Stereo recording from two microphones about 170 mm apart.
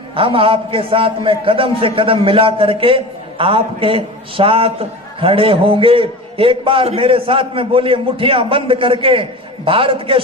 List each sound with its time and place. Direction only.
0.2 s a man's voice: 30° right (ahead or behind)